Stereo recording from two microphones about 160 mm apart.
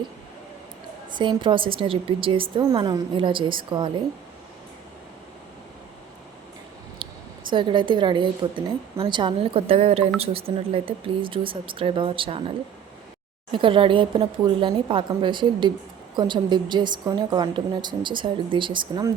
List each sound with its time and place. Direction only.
1.1 s a woman's voice: 30° right (ahead or behind)
7.0 s a sound: 35° right (ahead or behind)
7.5 s a woman's voice: 30° right (ahead or behind)